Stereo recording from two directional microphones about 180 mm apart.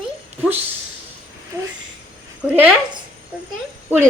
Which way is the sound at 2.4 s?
10° right (ahead or behind).